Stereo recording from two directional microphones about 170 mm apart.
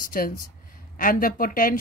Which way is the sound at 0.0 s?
55° left (ahead or behind).